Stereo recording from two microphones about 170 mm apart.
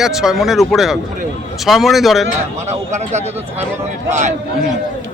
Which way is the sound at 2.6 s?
40° right (ahead or behind).